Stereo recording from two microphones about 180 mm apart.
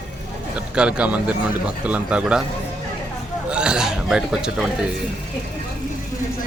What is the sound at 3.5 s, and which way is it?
Speech, 5° right (ahead or behind).